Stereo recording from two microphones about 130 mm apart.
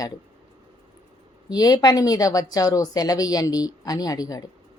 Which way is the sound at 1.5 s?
30° left (ahead or behind).